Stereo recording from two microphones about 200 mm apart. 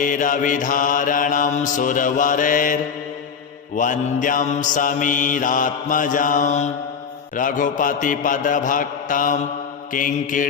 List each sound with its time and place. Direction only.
0.0 s mantra: 40° left (ahead or behind)
3.8 s mantra: 40° left (ahead or behind)